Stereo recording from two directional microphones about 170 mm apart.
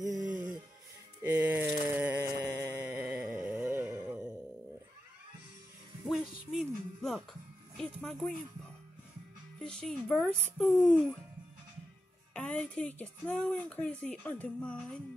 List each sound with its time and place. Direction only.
0.0 s music: 20° right (ahead or behind)
1.2 s a sound: 10° right (ahead or behind)
2.6 s music: 15° right (ahead or behind)
6.0 s music: centre (ahead or behind)
7.7 s speech: 5° left (ahead or behind)
9.6 s speech: 5° left (ahead or behind)
12.4 s a woman's voice: 5° left (ahead or behind)